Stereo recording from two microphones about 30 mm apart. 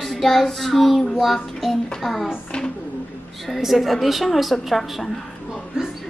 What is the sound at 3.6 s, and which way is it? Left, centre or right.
A child's voice, centre.